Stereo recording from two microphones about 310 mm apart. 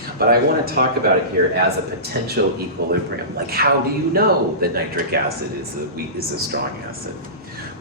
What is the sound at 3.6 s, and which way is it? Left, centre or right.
Speech, right.